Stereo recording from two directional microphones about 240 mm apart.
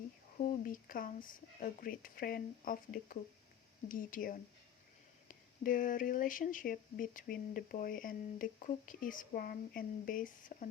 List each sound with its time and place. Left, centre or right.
0.3 s speech: left